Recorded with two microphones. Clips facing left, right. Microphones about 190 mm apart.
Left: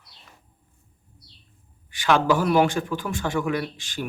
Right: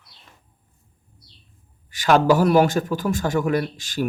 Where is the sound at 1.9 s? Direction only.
40° right (ahead or behind).